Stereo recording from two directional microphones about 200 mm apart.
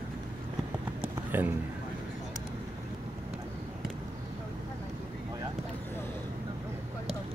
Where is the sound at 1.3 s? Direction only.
10° right (ahead or behind).